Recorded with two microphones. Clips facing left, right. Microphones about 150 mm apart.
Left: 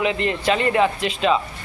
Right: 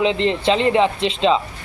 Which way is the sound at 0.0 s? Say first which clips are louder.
Right 3 dB; 25° right (ahead or behind).